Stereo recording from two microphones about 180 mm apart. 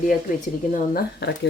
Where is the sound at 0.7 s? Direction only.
60° left (ahead or behind).